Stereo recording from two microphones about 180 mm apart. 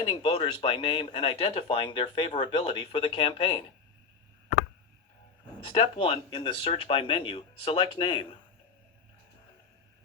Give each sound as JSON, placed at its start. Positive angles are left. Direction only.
{"t": 0.0, "sound": "speech", "side_deg": 30}
{"t": 5.5, "sound": "speech", "side_deg": 35}